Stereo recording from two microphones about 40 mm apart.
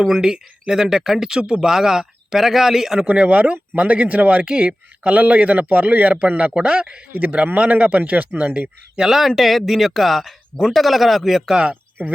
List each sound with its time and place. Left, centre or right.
0.0 s speech: centre
3.1 s speech: right
4.4 s speech: right
9.0 s speech: centre
11.7 s a sound: right